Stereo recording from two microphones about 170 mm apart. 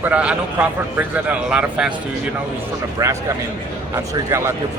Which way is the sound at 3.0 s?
20° right (ahead or behind).